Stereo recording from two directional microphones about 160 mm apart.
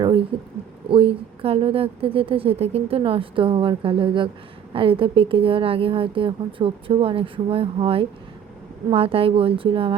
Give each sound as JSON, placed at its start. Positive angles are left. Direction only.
{"t": 0.9, "sound": "speech", "side_deg": -35}